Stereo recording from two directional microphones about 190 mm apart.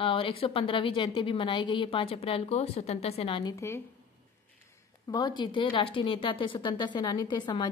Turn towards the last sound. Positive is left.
turn(degrees=25)  # may be behind; listen again after turning